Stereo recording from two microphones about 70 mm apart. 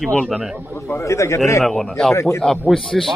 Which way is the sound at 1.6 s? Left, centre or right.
Centre.